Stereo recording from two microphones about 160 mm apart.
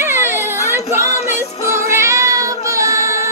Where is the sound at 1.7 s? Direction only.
15° right (ahead or behind).